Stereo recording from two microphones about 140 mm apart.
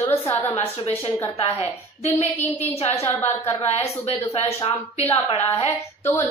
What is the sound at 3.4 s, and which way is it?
A woman's voice, 50° left (ahead or behind).